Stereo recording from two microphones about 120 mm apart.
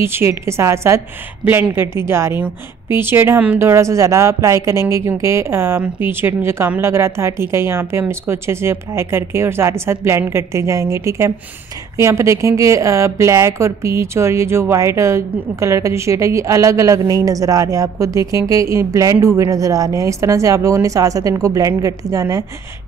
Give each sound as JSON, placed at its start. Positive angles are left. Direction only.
{"t": 0.0, "sound": "speech", "side_deg": -20}